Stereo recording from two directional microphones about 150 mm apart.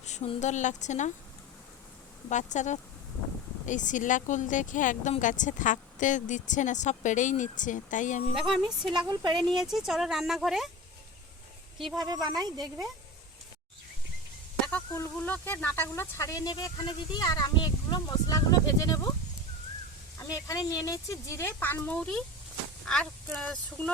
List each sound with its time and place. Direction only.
0.0 s a sound: 50° left (ahead or behind)
0.3 s speech: 50° left (ahead or behind)
2.3 s a woman's voice: 55° left (ahead or behind)
8.4 s speech: centre (ahead or behind)
8.9 s speech: 30° right (ahead or behind)
9.5 s speech: centre (ahead or behind)
11.9 s speech: 25° right (ahead or behind)
14.7 s speech: 10° left (ahead or behind)
20.1 s speech: 25° left (ahead or behind); by 23.9 s 5° left (ahead or behind)